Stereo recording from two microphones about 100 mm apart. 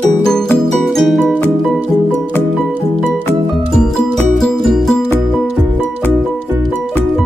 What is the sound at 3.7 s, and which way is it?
Music, 5° left (ahead or behind).